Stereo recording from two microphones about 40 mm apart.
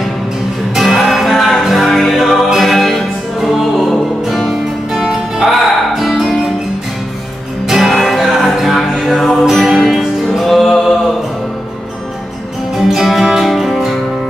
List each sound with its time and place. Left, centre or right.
0.7 s music: centre
4.3 s music: centre
7.6 s music: centre
12.7 s music: centre